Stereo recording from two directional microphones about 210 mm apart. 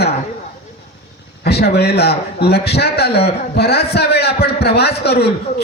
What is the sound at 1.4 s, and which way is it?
A man's voice, 50° left (ahead or behind).